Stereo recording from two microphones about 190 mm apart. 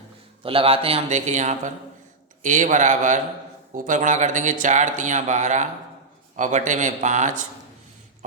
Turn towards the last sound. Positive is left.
turn(degrees=-40)  # may be behind; listen again after turning